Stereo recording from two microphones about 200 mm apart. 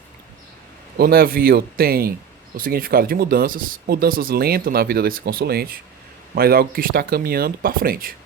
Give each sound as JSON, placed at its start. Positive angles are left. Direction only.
{"t": 0.9, "sound": "speech", "side_deg": -50}